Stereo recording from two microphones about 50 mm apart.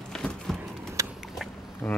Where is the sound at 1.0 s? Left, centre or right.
Right.